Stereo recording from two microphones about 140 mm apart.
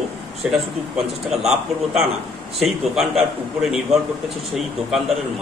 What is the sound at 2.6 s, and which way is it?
A man's voice, centre (ahead or behind).